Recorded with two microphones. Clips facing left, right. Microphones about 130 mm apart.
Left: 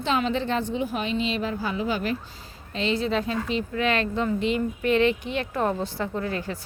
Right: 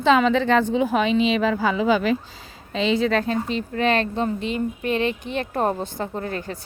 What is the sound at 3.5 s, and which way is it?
Speech, 40° right (ahead or behind).